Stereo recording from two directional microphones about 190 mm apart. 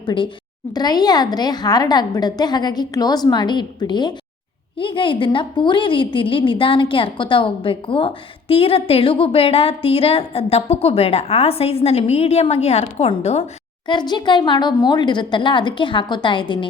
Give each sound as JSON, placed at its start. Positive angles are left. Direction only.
{"t": 0.0, "sound": "a woman's voice", "side_deg": 25}
{"t": 13.8, "sound": "a woman's voice", "side_deg": 25}